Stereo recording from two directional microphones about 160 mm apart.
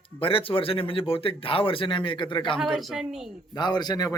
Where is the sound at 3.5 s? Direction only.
25° left (ahead or behind).